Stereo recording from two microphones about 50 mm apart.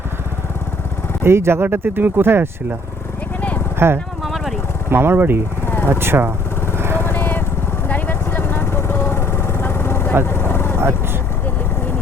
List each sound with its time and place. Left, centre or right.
1.2 s speech: right
1.7 s speech: right
3.8 s speech: right
4.2 s vehicle: centre
4.9 s speech: right
5.6 s vehicle: left
5.9 s speech: right
6.7 s vehicle: right
7.0 s vehicle: left
7.9 s lawn mower: left
10.2 s vehicle: left